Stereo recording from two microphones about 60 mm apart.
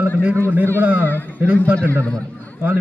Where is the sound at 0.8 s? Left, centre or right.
Right.